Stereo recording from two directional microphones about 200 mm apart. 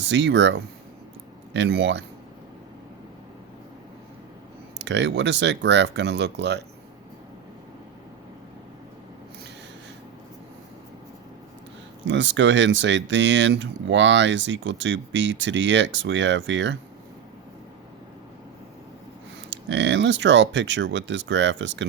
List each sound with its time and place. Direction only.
0.0 s speech: 65° right (ahead or behind)
4.9 s speech: 60° right (ahead or behind)
12.0 s speech: 65° right (ahead or behind)
19.5 s speech: 65° right (ahead or behind)